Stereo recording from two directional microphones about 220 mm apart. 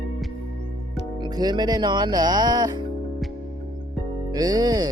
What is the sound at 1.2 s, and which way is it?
Speech, 20° right (ahead or behind).